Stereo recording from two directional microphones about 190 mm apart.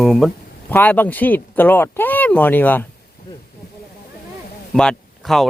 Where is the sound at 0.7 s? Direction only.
10° left (ahead or behind).